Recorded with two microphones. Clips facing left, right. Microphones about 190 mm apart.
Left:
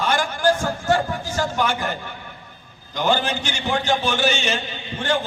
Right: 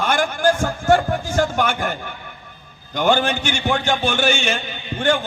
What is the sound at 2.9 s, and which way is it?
A man's voice, 55° right (ahead or behind).